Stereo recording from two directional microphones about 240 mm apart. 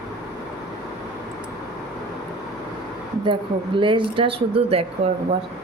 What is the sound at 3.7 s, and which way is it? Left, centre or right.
Speech, right.